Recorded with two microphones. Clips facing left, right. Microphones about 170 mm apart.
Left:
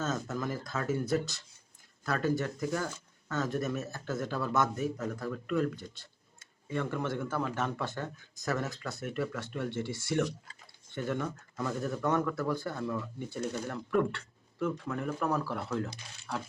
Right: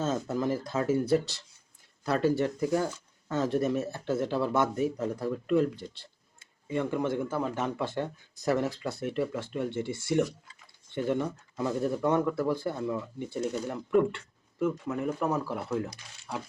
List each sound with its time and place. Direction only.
0.0 s speech: 30° right (ahead or behind)
6.7 s speech: 15° right (ahead or behind)
8.6 s speech: 30° right (ahead or behind)
9.2 s speech: 20° right (ahead or behind)
10.9 s speech: 20° right (ahead or behind)
12.0 s speech: 15° right (ahead or behind)
12.4 s speech: 25° right (ahead or behind)